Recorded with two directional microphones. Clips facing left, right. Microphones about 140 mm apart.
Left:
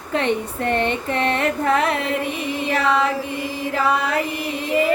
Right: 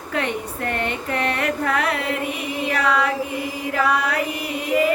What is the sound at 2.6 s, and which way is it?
Female singing, 25° left (ahead or behind).